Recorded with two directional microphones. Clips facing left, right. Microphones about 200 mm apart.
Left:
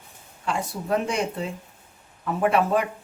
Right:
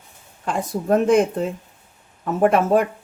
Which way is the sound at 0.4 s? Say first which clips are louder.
Right 5 dB; 50° right (ahead or behind).